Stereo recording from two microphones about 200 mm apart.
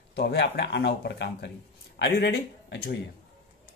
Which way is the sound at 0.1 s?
55° left (ahead or behind).